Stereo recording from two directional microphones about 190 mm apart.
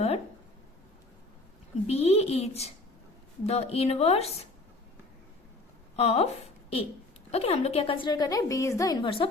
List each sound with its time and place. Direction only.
1.9 s a woman's voice: 35° left (ahead or behind)
6.0 s a woman's voice: 30° left (ahead or behind)